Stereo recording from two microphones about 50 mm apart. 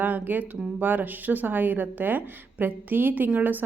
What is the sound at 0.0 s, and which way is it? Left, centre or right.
Speech, right.